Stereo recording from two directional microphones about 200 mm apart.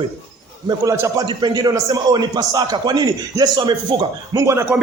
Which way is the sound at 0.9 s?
15° right (ahead or behind).